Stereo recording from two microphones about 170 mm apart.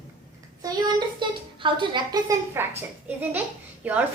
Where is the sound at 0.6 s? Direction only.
25° right (ahead or behind).